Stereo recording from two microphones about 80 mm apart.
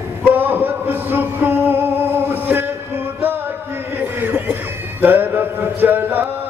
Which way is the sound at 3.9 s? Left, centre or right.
Right.